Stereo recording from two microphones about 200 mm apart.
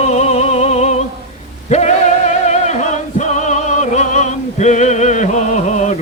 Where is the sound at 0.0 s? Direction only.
35° left (ahead or behind).